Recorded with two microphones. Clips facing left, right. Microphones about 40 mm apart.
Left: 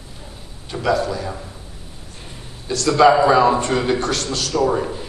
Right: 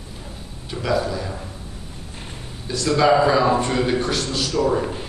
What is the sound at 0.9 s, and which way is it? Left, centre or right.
Speech, centre.